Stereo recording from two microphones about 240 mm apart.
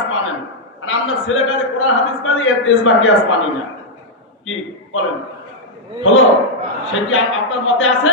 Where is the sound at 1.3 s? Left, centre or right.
Left.